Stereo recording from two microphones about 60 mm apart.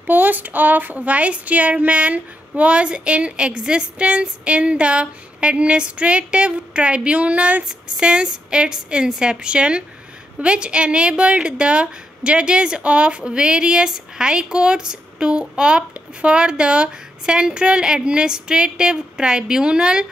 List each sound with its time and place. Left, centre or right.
0.0 s a woman's voice: right; by 20.1 s centre